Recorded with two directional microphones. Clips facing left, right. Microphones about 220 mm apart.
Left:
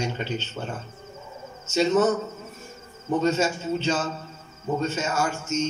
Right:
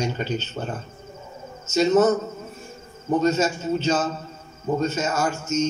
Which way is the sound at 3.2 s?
40° right (ahead or behind).